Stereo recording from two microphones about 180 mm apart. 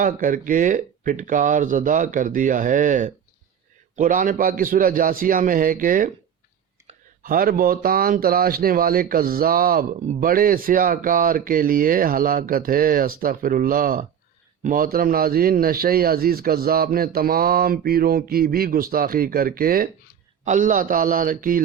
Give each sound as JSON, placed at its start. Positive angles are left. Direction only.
{"t": 0.0, "sound": "a man's voice", "side_deg": -50}